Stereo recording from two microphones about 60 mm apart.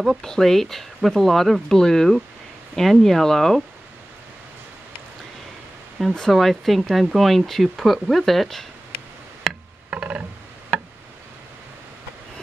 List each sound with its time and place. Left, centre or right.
0.2 s speech: centre
6.0 s speech: centre
9.8 s a sound: centre